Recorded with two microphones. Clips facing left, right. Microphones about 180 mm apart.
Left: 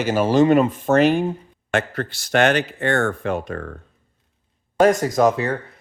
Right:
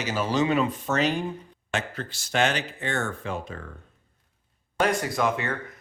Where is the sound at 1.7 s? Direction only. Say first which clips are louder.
Left 8 dB; 60° left (ahead or behind).